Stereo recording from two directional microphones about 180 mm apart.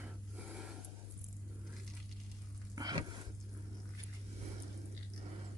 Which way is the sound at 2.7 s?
20° right (ahead or behind).